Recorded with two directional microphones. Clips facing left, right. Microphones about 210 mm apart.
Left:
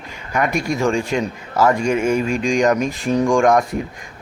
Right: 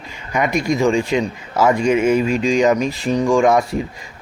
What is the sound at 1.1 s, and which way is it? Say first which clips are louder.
Speech: right 2 dB; centre (ahead or behind).